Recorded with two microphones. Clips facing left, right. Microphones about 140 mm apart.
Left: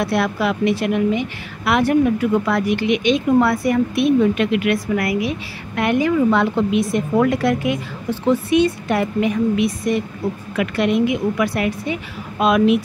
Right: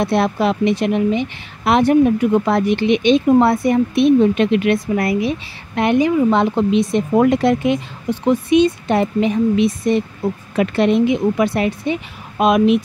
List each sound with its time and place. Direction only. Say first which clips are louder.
0.0 s a woman's voice: right 3 dB; 25° right (ahead or behind)